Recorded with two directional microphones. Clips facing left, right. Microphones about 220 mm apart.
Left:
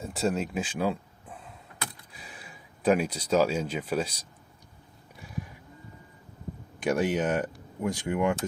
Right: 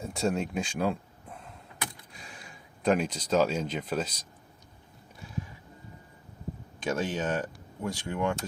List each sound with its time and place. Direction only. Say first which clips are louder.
0.0 s a sound: left 1 dB; centre (ahead or behind)
2.1 s speech: left 1 dB; 5° left (ahead or behind)
6.8 s speech: left 4 dB; 15° left (ahead or behind)